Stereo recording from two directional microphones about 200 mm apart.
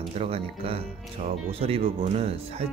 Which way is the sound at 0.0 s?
30° right (ahead or behind).